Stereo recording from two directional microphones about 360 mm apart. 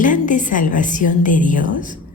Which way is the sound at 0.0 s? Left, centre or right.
Left.